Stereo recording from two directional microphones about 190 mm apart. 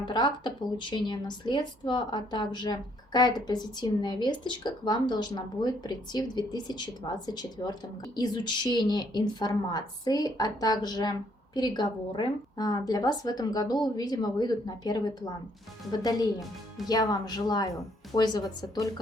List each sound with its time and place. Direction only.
0.0 s a woman's voice: 20° left (ahead or behind)
16.4 s speech: centre (ahead or behind)
16.9 s a woman's voice: 20° left (ahead or behind)